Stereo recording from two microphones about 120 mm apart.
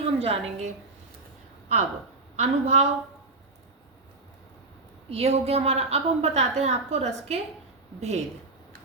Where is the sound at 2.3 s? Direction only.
70° right (ahead or behind).